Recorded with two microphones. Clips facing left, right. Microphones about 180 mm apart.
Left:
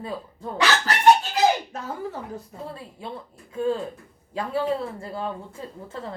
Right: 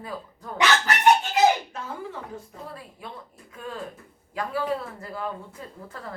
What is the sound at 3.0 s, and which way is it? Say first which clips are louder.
Speech: left 4 dB; 30° left (ahead or behind).